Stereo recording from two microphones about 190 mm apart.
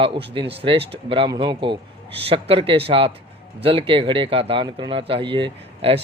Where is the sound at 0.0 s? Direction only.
30° right (ahead or behind).